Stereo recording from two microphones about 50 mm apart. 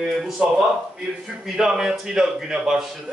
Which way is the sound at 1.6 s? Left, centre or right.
Centre.